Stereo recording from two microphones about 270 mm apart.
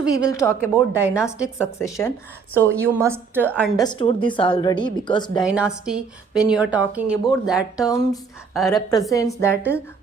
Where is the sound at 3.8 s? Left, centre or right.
Centre.